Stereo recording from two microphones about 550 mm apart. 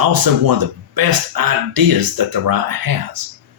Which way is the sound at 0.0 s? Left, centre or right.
Right.